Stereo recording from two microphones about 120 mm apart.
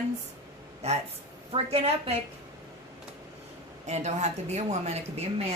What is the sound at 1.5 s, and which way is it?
Speech, 55° right (ahead or behind).